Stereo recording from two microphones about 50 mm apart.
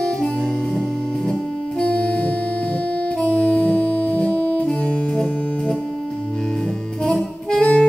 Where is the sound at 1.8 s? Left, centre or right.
Left.